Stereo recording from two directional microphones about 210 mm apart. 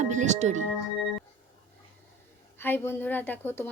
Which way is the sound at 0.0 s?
35° right (ahead or behind).